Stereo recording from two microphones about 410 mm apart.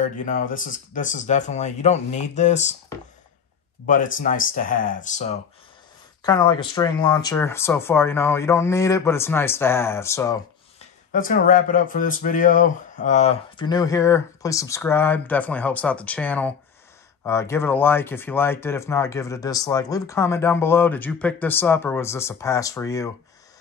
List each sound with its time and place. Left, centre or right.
0.0 s speech: centre
11.1 s speech: centre